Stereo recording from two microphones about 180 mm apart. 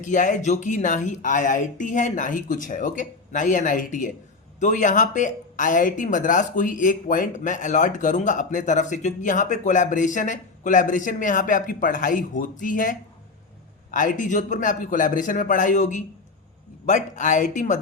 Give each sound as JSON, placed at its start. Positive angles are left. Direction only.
{"t": 0.0, "sound": "speech", "side_deg": 45}